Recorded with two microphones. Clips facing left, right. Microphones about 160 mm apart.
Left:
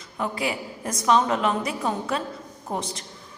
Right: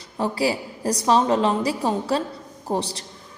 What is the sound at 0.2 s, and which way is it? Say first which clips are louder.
A woman's voice: right 5 dB; 35° right (ahead or behind).